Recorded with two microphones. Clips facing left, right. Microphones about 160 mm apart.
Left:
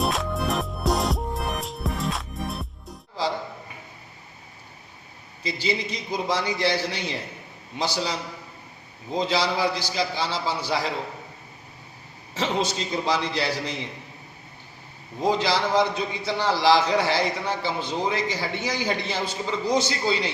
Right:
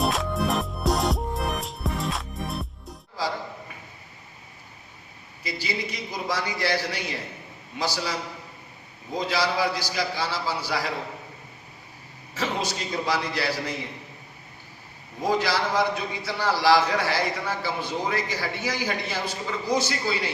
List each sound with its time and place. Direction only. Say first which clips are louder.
0.0 s music: right 1 dB; centre (ahead or behind)
5.4 s a man's voice: left 4 dB; 25° left (ahead or behind)
9.1 s a man's voice: left 1 dB; 25° left (ahead or behind)
12.3 s a man's voice: left 3 dB; 25° left (ahead or behind)
15.2 s a man's voice: left 2 dB; 25° left (ahead or behind)